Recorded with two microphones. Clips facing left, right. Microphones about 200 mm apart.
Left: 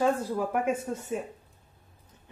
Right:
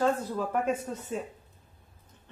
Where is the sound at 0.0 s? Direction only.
10° left (ahead or behind).